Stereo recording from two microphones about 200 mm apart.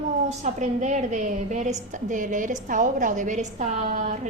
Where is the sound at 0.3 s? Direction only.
35° right (ahead or behind).